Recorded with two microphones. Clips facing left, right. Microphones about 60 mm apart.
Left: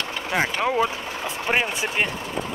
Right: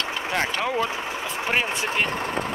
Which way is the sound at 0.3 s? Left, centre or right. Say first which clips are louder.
Left 3 dB; centre.